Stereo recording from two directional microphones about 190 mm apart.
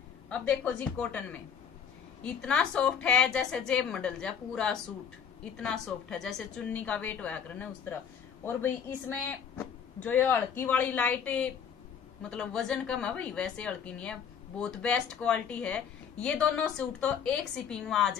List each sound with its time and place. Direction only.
0.3 s speech: 5° left (ahead or behind)